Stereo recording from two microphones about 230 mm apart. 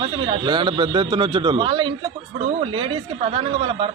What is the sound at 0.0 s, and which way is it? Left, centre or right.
A man's voice, right.